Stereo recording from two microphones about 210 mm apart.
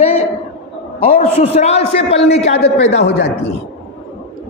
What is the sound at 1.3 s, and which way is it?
A man's voice, 30° left (ahead or behind).